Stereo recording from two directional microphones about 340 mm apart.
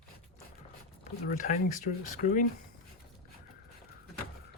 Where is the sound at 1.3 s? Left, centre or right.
Left.